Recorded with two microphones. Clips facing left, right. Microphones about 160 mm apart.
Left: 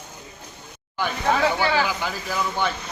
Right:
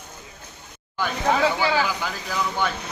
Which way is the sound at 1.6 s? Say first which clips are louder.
Even; 10° right (ahead or behind).